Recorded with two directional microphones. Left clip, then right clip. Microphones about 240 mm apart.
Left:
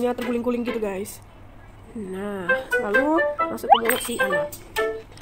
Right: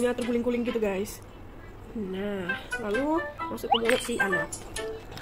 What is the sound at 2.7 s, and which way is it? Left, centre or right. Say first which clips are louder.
Speech: left 7 dB; centre.